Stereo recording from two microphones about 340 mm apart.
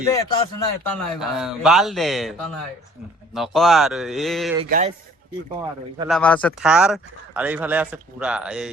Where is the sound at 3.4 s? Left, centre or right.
Centre.